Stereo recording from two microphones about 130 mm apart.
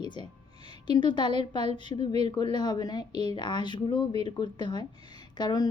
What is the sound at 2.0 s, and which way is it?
Speech, 55° right (ahead or behind).